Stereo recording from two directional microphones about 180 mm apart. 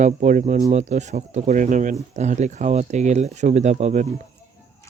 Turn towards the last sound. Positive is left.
turn(degrees=-40)  # may be behind; listen again after turning